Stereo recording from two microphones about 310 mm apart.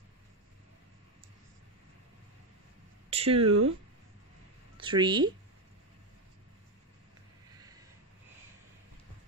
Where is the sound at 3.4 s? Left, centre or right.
Right.